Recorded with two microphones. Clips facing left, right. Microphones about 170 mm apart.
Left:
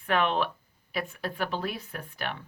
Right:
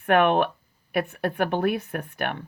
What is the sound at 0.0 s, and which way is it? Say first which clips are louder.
A woman's voice: right 7 dB; 55° right (ahead or behind).